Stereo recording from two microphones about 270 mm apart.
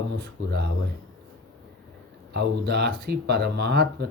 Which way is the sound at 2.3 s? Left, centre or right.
Right.